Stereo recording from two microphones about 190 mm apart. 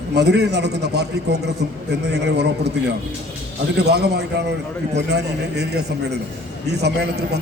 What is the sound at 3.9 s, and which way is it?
A man's voice, 60° right (ahead or behind).